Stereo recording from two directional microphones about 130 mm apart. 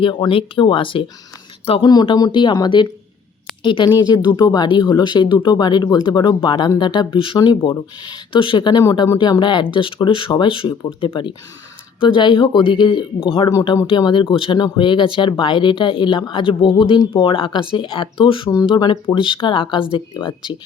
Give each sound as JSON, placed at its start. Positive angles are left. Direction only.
{"t": 0.0, "sound": "speech", "side_deg": 40}
{"t": 1.9, "sound": "speech", "side_deg": 30}